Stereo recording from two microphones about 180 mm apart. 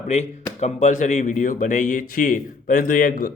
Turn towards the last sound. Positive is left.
turn(degrees=55)  # may be behind; listen again after turning